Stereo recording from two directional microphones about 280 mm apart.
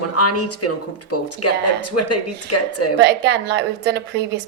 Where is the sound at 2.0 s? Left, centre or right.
Left.